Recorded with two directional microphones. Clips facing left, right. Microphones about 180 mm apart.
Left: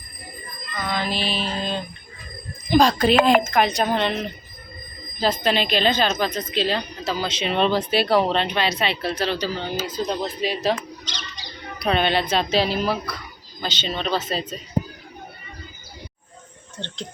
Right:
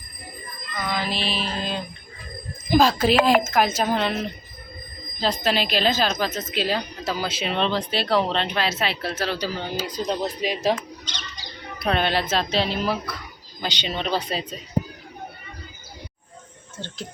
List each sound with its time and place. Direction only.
0.9 s mantra: centre (ahead or behind)
2.6 s a woman's voice: 5° right (ahead or behind)
7.5 s speech: 5° left (ahead or behind); by 10.8 s 15° right (ahead or behind)
11.8 s speech: centre (ahead or behind)
13.6 s speech: 15° right (ahead or behind)
16.8 s speech: 10° right (ahead or behind)